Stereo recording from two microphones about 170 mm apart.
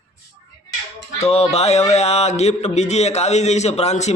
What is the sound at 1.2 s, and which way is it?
Speech, 40° left (ahead or behind).